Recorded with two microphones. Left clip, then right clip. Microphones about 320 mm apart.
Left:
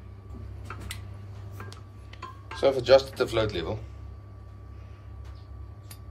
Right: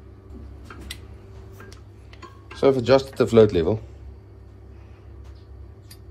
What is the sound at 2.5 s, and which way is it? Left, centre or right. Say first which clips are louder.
Speech: right 2 dB; centre.